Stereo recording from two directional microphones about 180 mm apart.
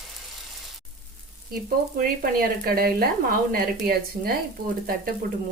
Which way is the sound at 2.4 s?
55° right (ahead or behind).